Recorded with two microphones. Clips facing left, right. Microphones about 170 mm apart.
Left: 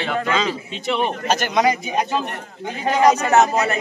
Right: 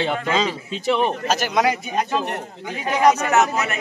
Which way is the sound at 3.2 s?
35° left (ahead or behind).